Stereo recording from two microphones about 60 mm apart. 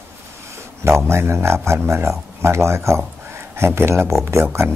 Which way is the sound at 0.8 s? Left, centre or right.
Right.